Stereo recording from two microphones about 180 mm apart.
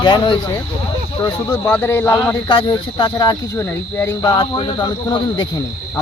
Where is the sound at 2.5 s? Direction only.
25° left (ahead or behind).